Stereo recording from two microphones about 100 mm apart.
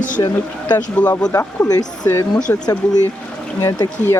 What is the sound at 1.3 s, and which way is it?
Speech, 25° left (ahead or behind).